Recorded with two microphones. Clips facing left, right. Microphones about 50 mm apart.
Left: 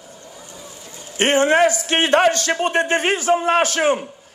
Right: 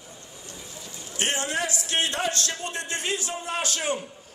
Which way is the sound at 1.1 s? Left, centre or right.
Left.